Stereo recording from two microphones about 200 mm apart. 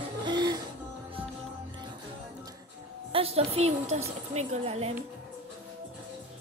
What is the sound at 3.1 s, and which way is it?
A woman's voice, 30° right (ahead or behind).